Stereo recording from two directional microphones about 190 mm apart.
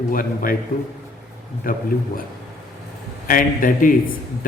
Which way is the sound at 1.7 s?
45° left (ahead or behind).